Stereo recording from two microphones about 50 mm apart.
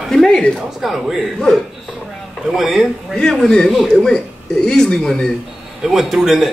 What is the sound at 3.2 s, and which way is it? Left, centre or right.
Speech, centre.